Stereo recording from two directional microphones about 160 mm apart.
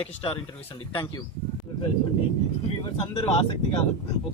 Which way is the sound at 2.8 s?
30° left (ahead or behind).